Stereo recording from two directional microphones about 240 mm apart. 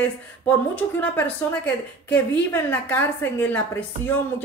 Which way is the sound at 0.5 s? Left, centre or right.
Centre.